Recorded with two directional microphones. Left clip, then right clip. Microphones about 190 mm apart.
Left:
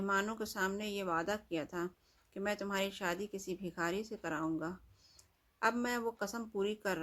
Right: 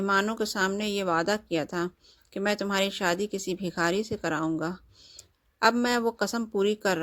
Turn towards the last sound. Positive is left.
turn(degrees=-45)  # may be behind; listen again after turning